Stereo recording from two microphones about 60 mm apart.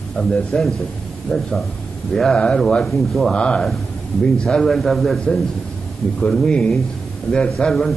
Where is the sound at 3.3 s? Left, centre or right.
Centre.